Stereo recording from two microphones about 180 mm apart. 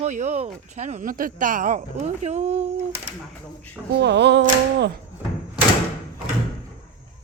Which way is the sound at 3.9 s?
70° right (ahead or behind).